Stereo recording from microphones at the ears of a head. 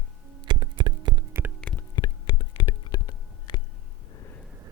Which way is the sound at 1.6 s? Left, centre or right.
Left.